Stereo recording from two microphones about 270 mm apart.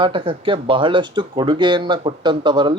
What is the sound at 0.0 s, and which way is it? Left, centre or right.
Speech, centre.